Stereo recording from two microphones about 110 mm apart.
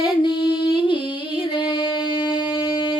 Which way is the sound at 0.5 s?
50° left (ahead or behind).